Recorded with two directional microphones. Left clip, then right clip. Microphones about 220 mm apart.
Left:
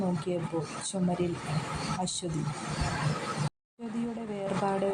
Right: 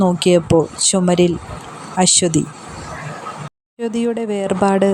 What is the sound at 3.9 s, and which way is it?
Speech, 40° right (ahead or behind).